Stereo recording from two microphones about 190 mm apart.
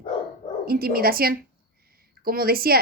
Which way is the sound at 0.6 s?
50° right (ahead or behind).